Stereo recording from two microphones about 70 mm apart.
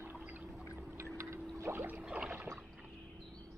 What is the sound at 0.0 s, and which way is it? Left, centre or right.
Pour, right.